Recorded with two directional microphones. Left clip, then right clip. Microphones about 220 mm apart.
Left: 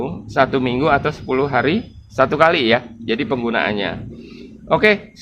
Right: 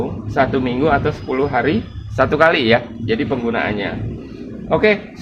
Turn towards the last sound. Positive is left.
turn(degrees=35)  # may be behind; listen again after turning